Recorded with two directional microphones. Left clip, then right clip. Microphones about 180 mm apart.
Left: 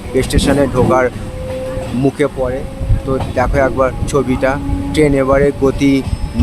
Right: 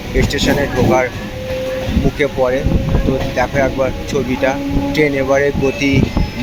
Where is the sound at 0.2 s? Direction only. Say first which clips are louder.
Left 2 dB; 25° left (ahead or behind).